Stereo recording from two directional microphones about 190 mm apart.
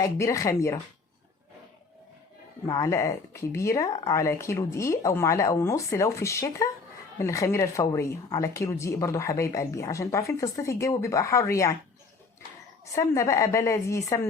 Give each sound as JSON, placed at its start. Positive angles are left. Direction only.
{"t": 0.0, "sound": "speech", "side_deg": 15}
{"t": 2.6, "sound": "speech", "side_deg": 15}
{"t": 12.8, "sound": "speech", "side_deg": 15}